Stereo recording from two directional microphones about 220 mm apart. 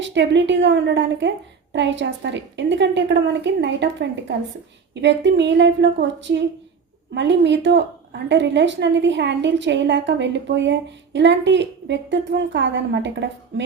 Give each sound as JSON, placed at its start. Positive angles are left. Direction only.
{"t": 0.0, "sound": "a woman's voice", "side_deg": -55}